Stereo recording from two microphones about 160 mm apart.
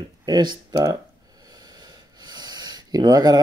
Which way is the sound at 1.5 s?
25° right (ahead or behind).